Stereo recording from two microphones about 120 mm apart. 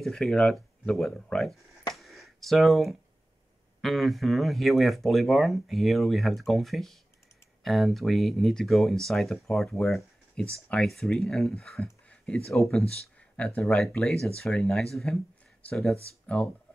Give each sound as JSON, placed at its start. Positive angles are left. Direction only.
{"t": 0.0, "sound": "speech", "side_deg": 5}
{"t": 2.0, "sound": "a sound", "side_deg": 0}
{"t": 3.8, "sound": "speech", "side_deg": 0}